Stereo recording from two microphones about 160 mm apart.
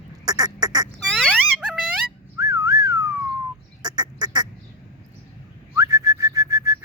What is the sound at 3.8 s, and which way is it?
Duck, 25° right (ahead or behind).